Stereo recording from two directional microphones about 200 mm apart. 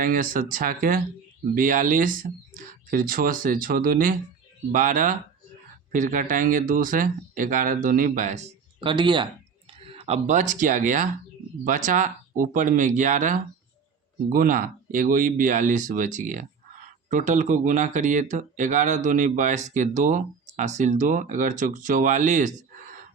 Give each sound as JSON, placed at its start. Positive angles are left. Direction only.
{"t": 0.0, "sound": "speech", "side_deg": -45}
{"t": 8.8, "sound": "speech", "side_deg": -25}